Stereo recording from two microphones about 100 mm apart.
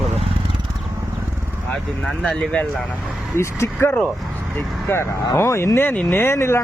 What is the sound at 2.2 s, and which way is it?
Speech, 10° left (ahead or behind).